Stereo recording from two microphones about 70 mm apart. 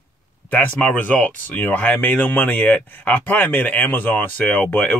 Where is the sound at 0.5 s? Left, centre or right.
Left.